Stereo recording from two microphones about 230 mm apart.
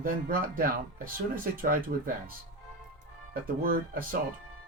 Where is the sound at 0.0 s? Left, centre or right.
Right.